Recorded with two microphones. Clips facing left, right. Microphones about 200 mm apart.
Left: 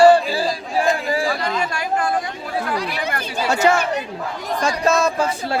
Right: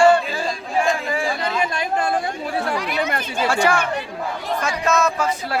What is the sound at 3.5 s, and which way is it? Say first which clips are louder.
Speech: left 3 dB; 20° left (ahead or behind).